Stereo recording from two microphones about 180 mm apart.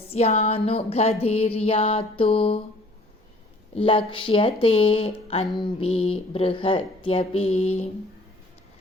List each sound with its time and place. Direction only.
0.1 s speech: 35° left (ahead or behind)
3.8 s speech: 30° left (ahead or behind)